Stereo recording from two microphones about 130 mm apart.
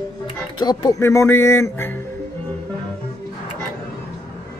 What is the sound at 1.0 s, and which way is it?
Speech, 20° left (ahead or behind).